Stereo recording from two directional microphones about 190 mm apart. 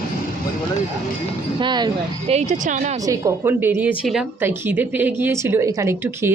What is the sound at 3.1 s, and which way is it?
A woman's voice, 15° right (ahead or behind).